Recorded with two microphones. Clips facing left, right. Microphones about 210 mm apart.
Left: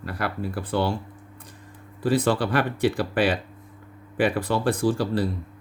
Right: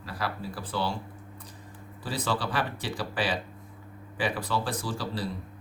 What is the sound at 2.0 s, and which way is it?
Speech, 55° left (ahead or behind).